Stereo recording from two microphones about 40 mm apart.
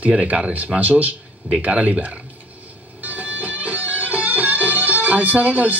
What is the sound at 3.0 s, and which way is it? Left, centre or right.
Music, right.